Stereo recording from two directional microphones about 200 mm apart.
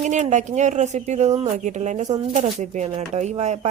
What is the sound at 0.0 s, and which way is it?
Speech, 35° right (ahead or behind).